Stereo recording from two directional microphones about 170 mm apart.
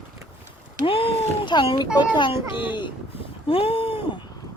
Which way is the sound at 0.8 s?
35° left (ahead or behind).